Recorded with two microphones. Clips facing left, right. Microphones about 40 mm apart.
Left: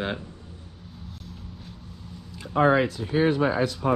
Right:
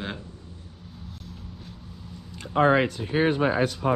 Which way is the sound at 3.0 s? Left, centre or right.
Right.